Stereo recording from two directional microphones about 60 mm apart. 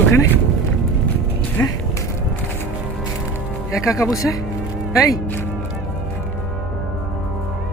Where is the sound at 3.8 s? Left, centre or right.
Left.